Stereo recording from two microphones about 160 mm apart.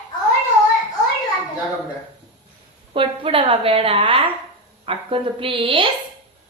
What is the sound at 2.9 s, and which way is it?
A woman's voice, 35° right (ahead or behind).